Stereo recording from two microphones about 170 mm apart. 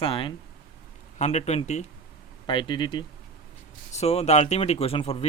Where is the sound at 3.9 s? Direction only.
40° left (ahead or behind).